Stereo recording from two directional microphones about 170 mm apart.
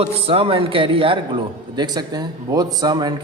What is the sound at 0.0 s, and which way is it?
A man's voice, 35° right (ahead or behind).